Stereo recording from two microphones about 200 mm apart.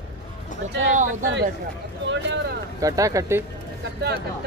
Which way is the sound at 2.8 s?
15° right (ahead or behind).